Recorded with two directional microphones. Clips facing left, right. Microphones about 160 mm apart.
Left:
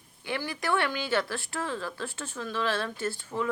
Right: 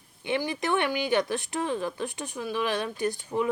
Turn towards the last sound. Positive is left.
turn(degrees=-15)  # may be behind; listen again after turning